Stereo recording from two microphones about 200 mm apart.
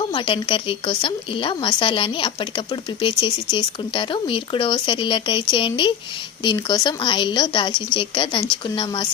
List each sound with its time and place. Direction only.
0.1 s speech: 25° left (ahead or behind)